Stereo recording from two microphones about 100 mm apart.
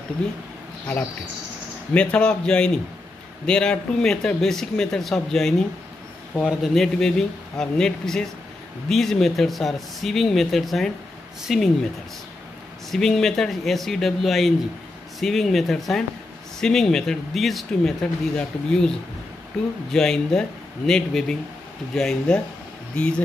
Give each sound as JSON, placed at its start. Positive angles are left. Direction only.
{"t": 2.0, "sound": "a man's voice", "side_deg": 10}
{"t": 12.9, "sound": "a man's voice", "side_deg": 5}